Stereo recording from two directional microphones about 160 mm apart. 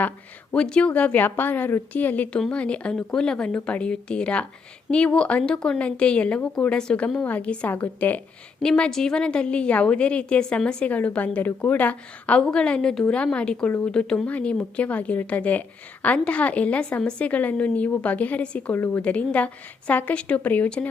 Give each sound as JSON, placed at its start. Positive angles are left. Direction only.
{"t": 0.5, "sound": "a woman's voice", "side_deg": 5}